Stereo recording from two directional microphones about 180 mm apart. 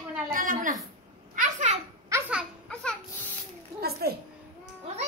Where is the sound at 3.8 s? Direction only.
60° right (ahead or behind).